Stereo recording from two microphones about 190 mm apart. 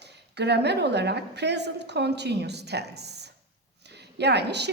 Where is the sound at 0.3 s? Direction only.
60° right (ahead or behind).